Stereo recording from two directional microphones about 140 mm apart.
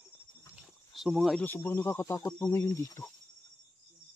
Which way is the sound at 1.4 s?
15° left (ahead or behind).